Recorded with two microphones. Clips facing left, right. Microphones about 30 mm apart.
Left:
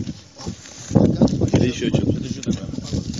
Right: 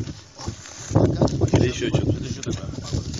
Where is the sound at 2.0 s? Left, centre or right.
Centre.